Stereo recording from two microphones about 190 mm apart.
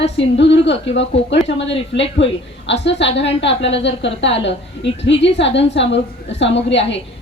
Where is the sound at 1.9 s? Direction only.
60° left (ahead or behind).